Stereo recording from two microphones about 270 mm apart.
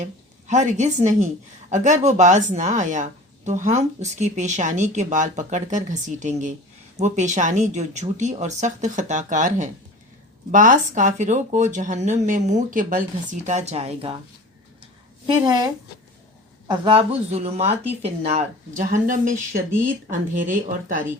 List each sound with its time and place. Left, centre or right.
0.0 s a woman's voice: right
15.3 s a woman's voice: centre; by 21.0 s right